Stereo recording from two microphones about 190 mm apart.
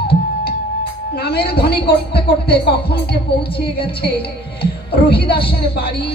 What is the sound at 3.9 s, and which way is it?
Speech, 55° left (ahead or behind).